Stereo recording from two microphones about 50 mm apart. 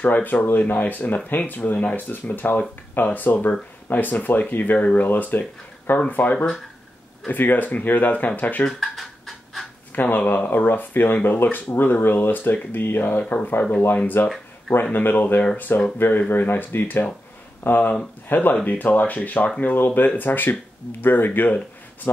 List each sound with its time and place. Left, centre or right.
0.0 s speech: left
8.7 s pant: centre
9.9 s speech: left
13.2 s speech: left